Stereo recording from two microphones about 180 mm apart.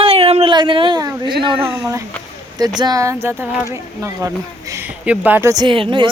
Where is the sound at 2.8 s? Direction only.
20° right (ahead or behind).